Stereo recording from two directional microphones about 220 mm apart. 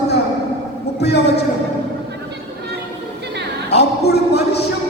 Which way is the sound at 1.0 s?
50° left (ahead or behind).